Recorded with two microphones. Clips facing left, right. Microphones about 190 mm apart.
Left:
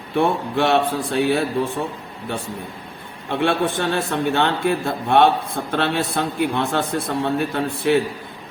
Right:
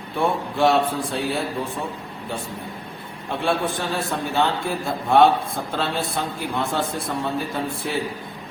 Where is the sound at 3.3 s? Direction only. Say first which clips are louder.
Left 3 dB; 70° left (ahead or behind).